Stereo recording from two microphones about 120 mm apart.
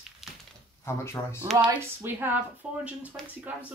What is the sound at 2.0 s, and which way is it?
Speech, 15° right (ahead or behind).